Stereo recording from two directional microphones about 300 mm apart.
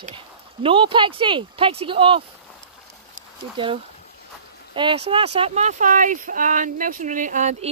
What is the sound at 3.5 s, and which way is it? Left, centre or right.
Speech, centre.